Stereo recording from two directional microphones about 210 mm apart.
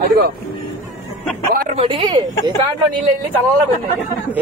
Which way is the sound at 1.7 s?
25° right (ahead or behind).